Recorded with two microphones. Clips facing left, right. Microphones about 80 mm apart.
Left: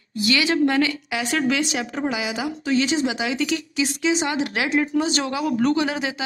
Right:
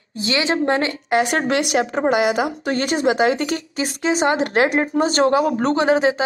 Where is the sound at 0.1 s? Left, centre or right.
Right.